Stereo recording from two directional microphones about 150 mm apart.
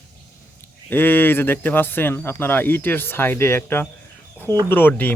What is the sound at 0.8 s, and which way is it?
A man's voice, 15° left (ahead or behind).